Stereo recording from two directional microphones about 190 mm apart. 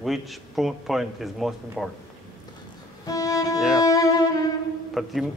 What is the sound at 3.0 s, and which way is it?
Music, 20° left (ahead or behind).